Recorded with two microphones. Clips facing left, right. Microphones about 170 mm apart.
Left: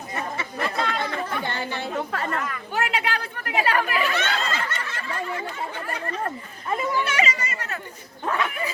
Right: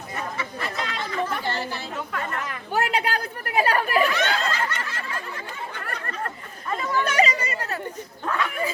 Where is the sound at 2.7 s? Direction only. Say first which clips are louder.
Right 2 dB; 40° right (ahead or behind).